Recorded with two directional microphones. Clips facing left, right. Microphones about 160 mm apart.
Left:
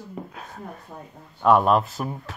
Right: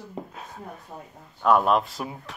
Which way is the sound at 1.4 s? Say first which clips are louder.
Left 2 dB; centre (ahead or behind).